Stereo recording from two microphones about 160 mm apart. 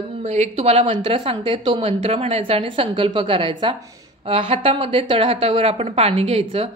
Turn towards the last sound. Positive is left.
turn(degrees=-40)  # may be behind; listen again after turning